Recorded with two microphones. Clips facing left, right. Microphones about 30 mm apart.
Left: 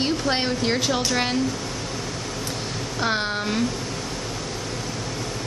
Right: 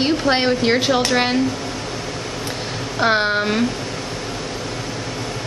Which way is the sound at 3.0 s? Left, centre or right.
Right.